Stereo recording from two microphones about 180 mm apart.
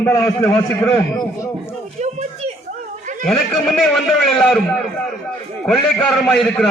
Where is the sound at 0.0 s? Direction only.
15° left (ahead or behind).